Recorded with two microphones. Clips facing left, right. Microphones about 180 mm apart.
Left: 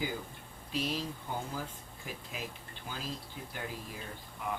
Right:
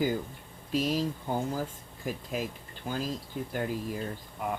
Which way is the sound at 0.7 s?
45° right (ahead or behind).